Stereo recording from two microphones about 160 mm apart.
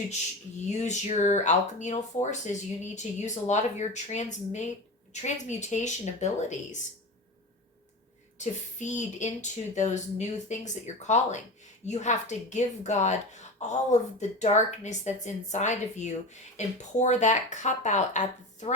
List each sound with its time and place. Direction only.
0.7 s speech: 45° left (ahead or behind)
8.8 s speech: 50° left (ahead or behind)